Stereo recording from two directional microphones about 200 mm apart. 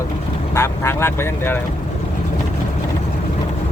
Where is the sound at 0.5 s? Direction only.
15° left (ahead or behind).